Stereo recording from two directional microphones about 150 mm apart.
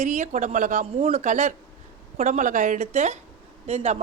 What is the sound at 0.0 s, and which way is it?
A woman's voice, 50° right (ahead or behind).